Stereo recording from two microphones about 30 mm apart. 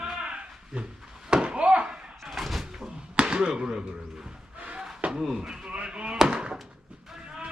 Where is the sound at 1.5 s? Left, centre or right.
Right.